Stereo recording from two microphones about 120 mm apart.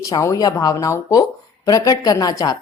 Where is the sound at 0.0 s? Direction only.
25° left (ahead or behind).